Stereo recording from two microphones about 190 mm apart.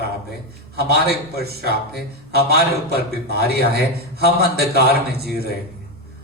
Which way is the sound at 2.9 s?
55° right (ahead or behind).